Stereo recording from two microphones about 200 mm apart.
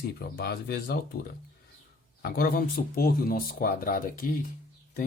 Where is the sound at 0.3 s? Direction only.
50° left (ahead or behind).